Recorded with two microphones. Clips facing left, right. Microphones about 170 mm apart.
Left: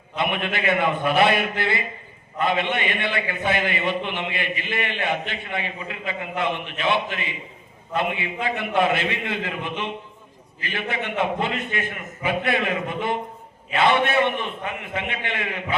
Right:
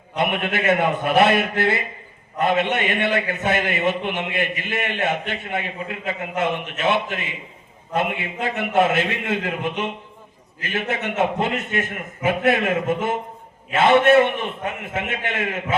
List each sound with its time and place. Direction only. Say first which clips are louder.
0.2 s a man's voice: right 3 dB; 45° right (ahead or behind)